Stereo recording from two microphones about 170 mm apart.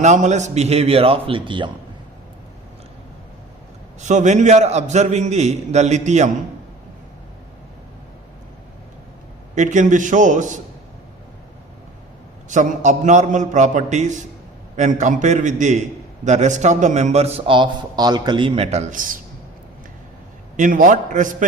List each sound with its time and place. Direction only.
0.0 s a man's voice: 45° right (ahead or behind); by 1.7 s 30° right (ahead or behind)
4.0 s a man's voice: 45° right (ahead or behind)
9.6 s a man's voice: 45° right (ahead or behind)
12.5 s a man's voice: 45° right (ahead or behind)
20.6 s a man's voice: 50° right (ahead or behind)